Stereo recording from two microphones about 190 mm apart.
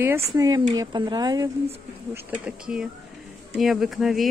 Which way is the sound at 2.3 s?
5° right (ahead or behind).